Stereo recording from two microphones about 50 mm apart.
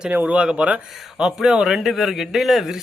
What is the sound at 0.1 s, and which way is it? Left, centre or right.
Speech, right.